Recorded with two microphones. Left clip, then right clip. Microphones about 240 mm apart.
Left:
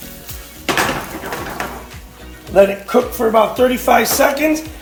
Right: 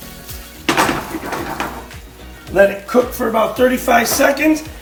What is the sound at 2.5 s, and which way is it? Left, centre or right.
Speech, left.